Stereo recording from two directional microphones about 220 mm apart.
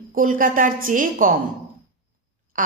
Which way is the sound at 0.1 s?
40° right (ahead or behind).